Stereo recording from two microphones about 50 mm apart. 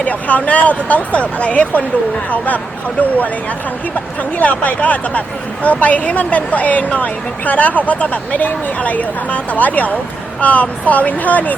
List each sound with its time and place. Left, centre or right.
0.0 s speech: left
4.2 s a woman's voice: left